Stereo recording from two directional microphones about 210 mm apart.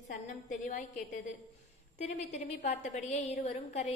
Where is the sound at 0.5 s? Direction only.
35° left (ahead or behind).